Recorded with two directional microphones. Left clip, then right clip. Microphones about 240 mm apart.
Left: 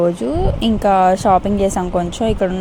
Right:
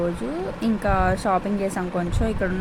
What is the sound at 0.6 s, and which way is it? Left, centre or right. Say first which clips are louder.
Speech: left 9 dB; left.